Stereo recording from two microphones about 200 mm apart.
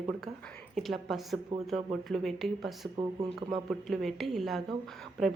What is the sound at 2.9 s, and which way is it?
Speech, 15° right (ahead or behind).